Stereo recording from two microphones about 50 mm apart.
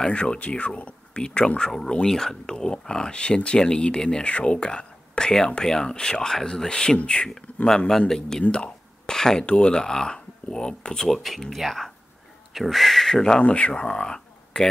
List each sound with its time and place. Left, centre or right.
0.0 s speech: centre
11.1 s speech: centre
13.4 s speech: left